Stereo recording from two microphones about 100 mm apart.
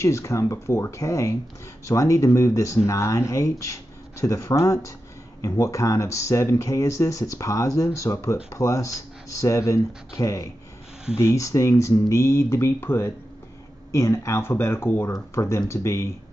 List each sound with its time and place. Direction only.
0.0 s speech: 30° left (ahead or behind)